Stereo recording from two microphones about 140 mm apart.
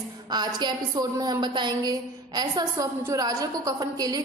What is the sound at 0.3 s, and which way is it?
A woman's voice, 30° right (ahead or behind).